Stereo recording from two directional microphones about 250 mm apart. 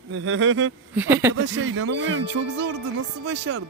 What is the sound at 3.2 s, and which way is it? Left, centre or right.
Speech, right.